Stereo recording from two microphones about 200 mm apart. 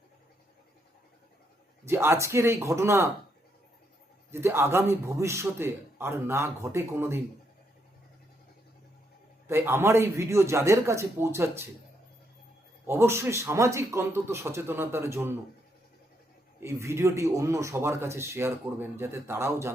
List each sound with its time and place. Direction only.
1.8 s a man's voice: 15° right (ahead or behind)
4.3 s a man's voice: 10° right (ahead or behind)
9.5 s a man's voice: 10° right (ahead or behind)
12.9 s a man's voice: 15° right (ahead or behind)
16.6 s a man's voice: 15° right (ahead or behind)